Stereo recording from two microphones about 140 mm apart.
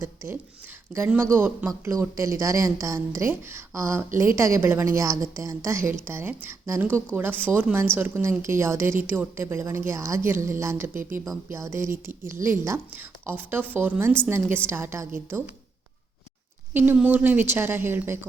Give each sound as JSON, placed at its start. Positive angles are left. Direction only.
{"t": 0.0, "sound": "a woman's voice", "side_deg": -20}
{"t": 16.7, "sound": "a woman's voice", "side_deg": -10}